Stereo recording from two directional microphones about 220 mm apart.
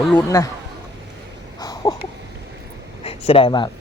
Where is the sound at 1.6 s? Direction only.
15° left (ahead or behind).